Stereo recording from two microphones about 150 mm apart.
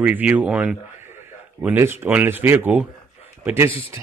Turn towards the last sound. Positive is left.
turn(degrees=-15)  # may be behind; listen again after turning